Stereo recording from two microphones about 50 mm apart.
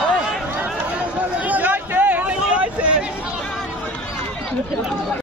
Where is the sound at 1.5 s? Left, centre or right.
Right.